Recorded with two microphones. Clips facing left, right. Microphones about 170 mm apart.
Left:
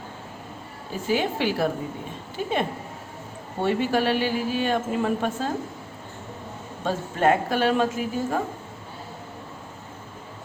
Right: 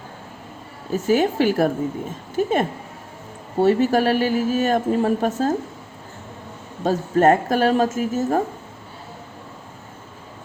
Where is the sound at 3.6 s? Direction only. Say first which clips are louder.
Right 6 dB; 40° right (ahead or behind).